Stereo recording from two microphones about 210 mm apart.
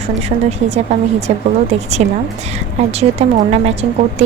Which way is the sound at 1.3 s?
30° right (ahead or behind).